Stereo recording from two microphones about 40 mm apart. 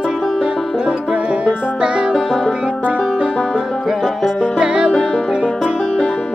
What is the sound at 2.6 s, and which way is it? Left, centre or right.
Music, right.